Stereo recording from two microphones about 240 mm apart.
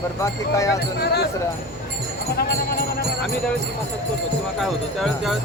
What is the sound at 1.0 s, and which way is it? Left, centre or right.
Speech, left.